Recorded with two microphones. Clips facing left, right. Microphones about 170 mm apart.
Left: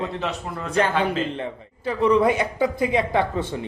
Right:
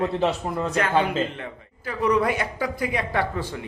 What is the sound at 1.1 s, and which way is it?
Speech, 30° left (ahead or behind).